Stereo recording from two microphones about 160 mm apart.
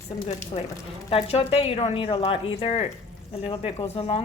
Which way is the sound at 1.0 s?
35° left (ahead or behind).